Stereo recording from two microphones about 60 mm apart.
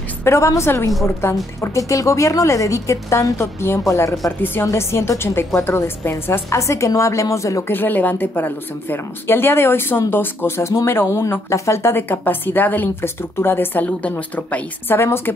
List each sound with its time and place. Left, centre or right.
0.2 s a woman's voice: left
1.2 s speech: left
1.6 s a woman's voice: left
3.8 s a woman's voice: left
4.6 s a woman's voice: left
6.6 s a woman's voice: left
7.6 s a woman's voice: left
14.1 s speech: left
14.9 s a woman's voice: left